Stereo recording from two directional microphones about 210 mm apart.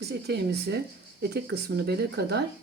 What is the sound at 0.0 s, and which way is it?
Speech, 50° right (ahead or behind).